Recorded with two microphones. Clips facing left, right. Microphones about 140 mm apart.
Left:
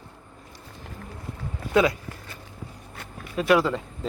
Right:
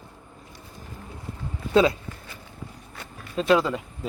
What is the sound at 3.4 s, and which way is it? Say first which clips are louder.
Speech: even; 20° right (ahead or behind).